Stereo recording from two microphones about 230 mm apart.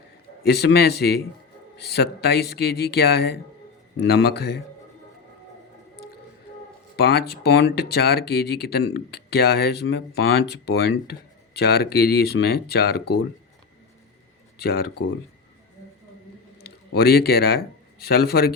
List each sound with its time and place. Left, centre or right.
0.4 s speech: left
6.9 s speech: left
14.6 s speech: left
16.6 s speech: left